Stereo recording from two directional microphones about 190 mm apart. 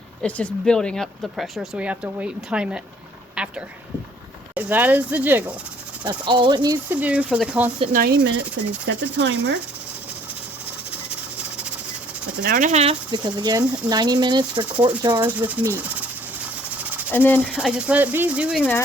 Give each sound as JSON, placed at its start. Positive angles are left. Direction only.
{"t": 0.2, "sound": "speech", "side_deg": 5}
{"t": 6.1, "sound": "speech", "side_deg": -25}
{"t": 6.8, "sound": "speech", "side_deg": -10}
{"t": 7.9, "sound": "speech", "side_deg": -55}
{"t": 8.9, "sound": "speech", "side_deg": -70}
{"t": 11.3, "sound": "a sound", "side_deg": -5}
{"t": 12.4, "sound": "speech", "side_deg": -45}
{"t": 15.2, "sound": "speech", "side_deg": -10}
{"t": 17.1, "sound": "speech", "side_deg": 10}
{"t": 17.5, "sound": "speech", "side_deg": -5}